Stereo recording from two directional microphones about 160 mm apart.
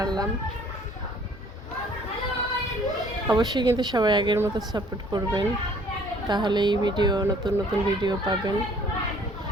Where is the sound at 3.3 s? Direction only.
25° right (ahead or behind).